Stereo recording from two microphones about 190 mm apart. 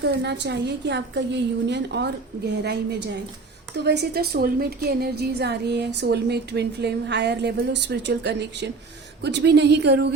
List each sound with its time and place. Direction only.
0.0 s a woman's voice: 65° right (ahead or behind)
3.8 s a woman's voice: 60° right (ahead or behind)